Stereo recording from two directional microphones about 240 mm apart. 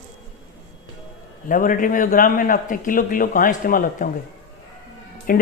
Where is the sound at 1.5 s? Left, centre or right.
Left.